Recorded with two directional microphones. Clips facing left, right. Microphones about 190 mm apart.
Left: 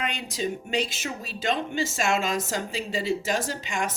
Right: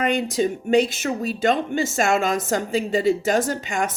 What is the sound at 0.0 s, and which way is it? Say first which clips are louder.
Speech: right 9 dB; 50° right (ahead or behind).